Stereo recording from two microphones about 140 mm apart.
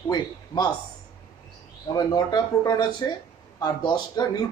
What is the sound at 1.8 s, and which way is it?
Speech, 30° left (ahead or behind).